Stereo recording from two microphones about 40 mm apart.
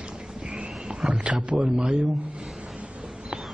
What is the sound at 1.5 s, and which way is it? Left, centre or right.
Speech, right.